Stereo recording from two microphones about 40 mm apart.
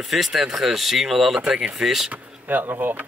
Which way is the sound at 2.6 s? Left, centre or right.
Right.